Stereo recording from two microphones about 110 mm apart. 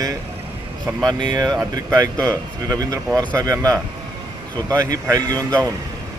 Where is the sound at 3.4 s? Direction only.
35° right (ahead or behind).